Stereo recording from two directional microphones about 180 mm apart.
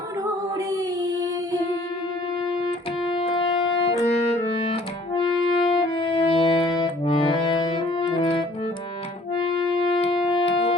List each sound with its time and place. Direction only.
2.5 s music: 30° left (ahead or behind)